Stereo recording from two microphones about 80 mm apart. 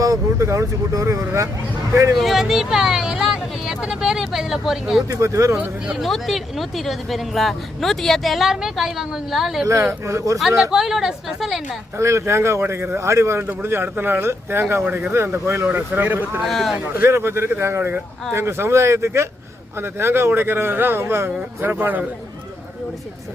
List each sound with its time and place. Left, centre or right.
0.0 s speech: right
2.1 s speech: centre
5.0 s speech: right
6.0 s speech: centre
10.1 s speech: right
10.6 s speech: centre
11.9 s speech: right
15.6 s speech: right
16.4 s speech: centre
16.7 s speech: right